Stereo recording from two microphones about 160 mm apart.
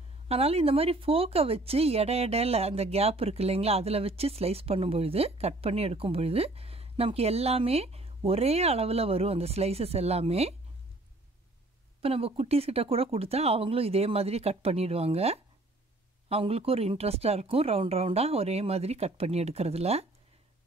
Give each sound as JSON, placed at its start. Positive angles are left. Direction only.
{"t": 0.3, "sound": "speech", "side_deg": -40}
{"t": 12.0, "sound": "speech", "side_deg": -40}